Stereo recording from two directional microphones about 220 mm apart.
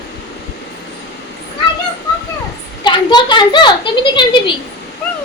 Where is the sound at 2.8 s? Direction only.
20° left (ahead or behind).